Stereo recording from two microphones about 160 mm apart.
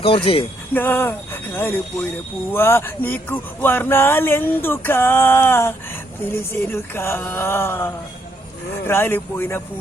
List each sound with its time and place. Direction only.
0.3 s speech: 35° left (ahead or behind)
0.7 s speech: 10° left (ahead or behind)